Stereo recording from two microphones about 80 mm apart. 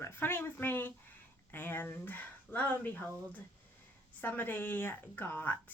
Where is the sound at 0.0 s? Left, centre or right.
Left.